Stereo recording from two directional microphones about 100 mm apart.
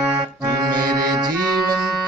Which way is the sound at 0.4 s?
45° right (ahead or behind).